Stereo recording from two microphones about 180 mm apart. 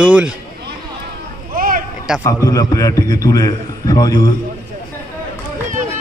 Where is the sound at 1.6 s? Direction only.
55° right (ahead or behind).